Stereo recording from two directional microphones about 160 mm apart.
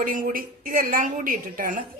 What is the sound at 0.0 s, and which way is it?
A woman's voice, 60° right (ahead or behind).